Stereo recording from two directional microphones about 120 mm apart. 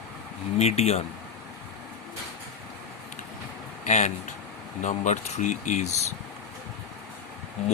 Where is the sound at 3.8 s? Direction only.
75° left (ahead or behind).